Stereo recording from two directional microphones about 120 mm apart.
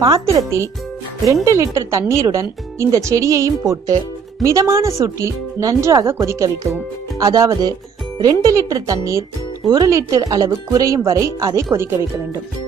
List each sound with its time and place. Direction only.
1.2 s speech: 25° right (ahead or behind)